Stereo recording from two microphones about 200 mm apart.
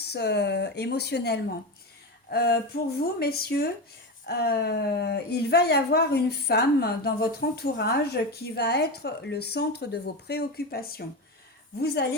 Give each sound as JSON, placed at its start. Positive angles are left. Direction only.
{"t": 0.1, "sound": "speech", "side_deg": 55}